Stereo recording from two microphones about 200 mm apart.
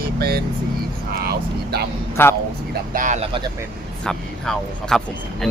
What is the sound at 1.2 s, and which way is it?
Speech, 50° right (ahead or behind).